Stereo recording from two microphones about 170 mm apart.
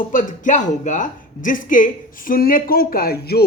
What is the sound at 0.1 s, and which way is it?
A woman's voice, 50° left (ahead or behind).